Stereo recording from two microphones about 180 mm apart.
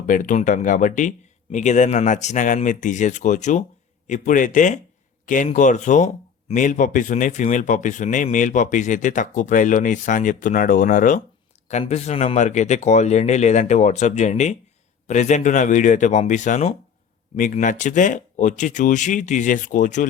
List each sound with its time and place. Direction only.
0.0 s speech: 45° left (ahead or behind)
11.7 s speech: 35° left (ahead or behind)